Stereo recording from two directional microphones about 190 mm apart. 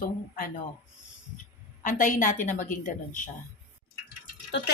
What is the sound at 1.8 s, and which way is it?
A woman's voice, 45° left (ahead or behind).